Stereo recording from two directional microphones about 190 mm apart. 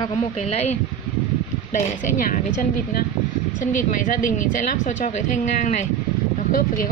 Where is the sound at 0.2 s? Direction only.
35° left (ahead or behind).